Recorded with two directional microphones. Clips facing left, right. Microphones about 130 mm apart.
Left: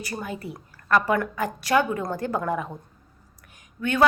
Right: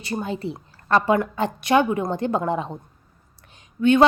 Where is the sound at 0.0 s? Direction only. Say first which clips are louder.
Right 5 dB; 25° right (ahead or behind).